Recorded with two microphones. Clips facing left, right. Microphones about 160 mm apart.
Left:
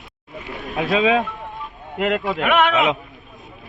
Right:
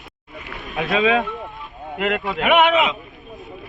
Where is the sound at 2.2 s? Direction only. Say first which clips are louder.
Right 4 dB; centre (ahead or behind).